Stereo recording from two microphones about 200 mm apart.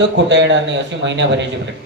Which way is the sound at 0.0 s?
60° right (ahead or behind).